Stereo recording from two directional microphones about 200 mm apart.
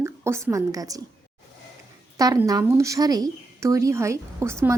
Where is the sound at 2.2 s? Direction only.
20° right (ahead or behind).